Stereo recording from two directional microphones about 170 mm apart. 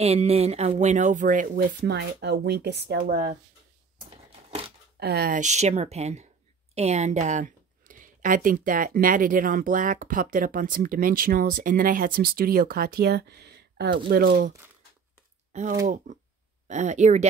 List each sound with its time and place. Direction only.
0.0 s a woman's voice: 35° right (ahead or behind); by 3.0 s 75° right (ahead or behind)
3.1 s speech: 55° right (ahead or behind)
5.0 s speech: 65° right (ahead or behind)
5.4 s a woman's voice: 40° right (ahead or behind); by 14.5 s 65° right (ahead or behind)
16.1 s a woman's voice: 45° right (ahead or behind)